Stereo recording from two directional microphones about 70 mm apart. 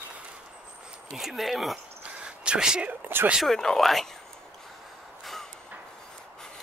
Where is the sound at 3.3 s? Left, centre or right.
Centre.